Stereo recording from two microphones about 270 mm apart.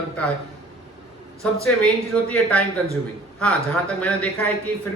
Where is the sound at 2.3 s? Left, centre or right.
Centre.